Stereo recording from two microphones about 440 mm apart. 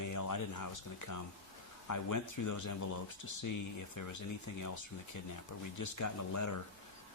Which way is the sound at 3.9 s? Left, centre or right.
Left.